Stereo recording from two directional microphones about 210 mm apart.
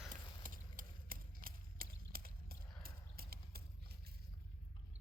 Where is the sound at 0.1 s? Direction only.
40° right (ahead or behind).